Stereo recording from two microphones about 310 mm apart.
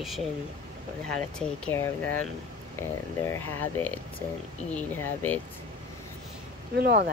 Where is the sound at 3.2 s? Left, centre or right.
Centre.